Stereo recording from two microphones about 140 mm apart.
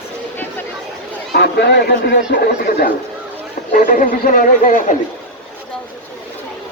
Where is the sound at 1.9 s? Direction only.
90° left.